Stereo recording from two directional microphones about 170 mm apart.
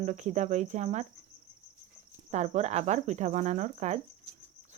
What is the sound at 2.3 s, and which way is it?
Cricket, 40° right (ahead or behind).